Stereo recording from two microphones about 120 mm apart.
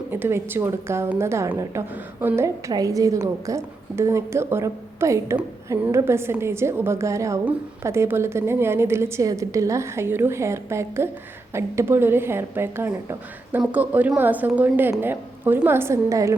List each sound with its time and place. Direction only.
0.1 s a woman's voice: 20° right (ahead or behind)